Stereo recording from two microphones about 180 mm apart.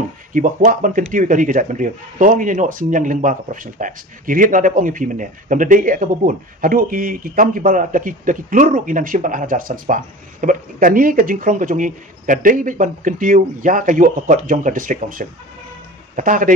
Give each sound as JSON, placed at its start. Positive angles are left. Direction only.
{"t": 0.3, "sound": "speech", "side_deg": -45}